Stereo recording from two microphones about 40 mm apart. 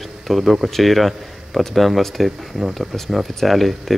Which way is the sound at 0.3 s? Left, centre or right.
Centre.